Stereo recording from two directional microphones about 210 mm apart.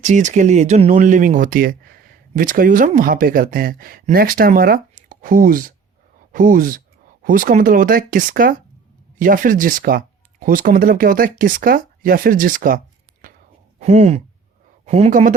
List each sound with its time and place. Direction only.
0.0 s speech: 35° right (ahead or behind)